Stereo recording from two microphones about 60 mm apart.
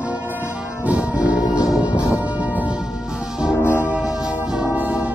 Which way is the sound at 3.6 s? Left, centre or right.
Left.